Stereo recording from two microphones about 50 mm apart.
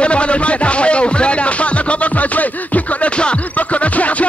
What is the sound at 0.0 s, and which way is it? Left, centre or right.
Music, left.